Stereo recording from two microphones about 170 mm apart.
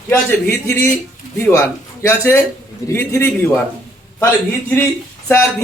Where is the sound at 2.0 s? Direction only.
15° left (ahead or behind).